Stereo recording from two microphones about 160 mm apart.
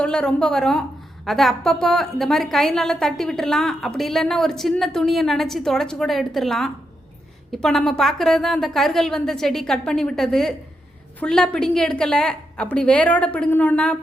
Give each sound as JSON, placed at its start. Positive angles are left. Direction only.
{"t": 0.0, "sound": "a woman's voice", "side_deg": 5}